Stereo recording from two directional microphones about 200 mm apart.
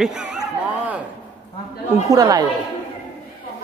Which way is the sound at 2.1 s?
15° right (ahead or behind).